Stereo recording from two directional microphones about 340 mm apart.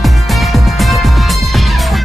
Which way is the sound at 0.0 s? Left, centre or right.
Centre.